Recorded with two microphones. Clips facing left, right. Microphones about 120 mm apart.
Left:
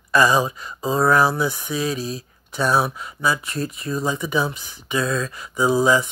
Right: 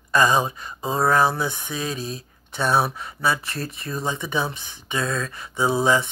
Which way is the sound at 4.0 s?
25° right (ahead or behind).